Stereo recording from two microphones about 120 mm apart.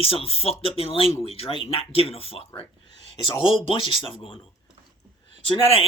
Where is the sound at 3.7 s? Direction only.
50° left (ahead or behind).